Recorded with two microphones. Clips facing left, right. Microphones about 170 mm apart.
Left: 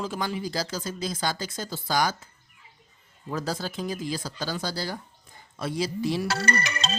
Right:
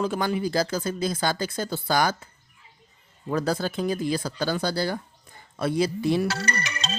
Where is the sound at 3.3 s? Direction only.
60° right (ahead or behind).